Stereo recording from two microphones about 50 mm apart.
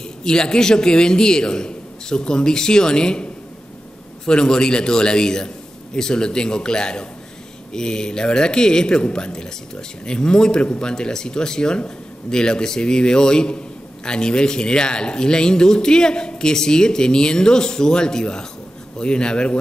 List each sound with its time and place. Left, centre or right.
0.2 s speech: centre
4.3 s speech: centre